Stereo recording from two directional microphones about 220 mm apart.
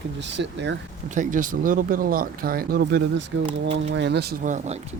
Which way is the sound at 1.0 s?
35° right (ahead or behind).